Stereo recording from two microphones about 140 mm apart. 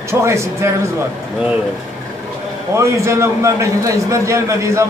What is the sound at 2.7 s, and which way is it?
A man's voice, 20° right (ahead or behind).